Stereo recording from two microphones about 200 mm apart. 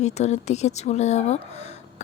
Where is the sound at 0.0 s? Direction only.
35° left (ahead or behind).